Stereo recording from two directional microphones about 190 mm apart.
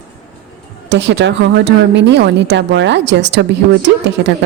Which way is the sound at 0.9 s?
65° right (ahead or behind).